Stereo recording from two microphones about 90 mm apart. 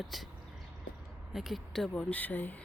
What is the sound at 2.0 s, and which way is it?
Speech, 15° left (ahead or behind).